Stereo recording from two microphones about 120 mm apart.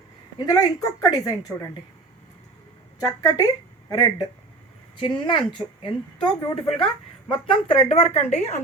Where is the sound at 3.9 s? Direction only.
30° left (ahead or behind).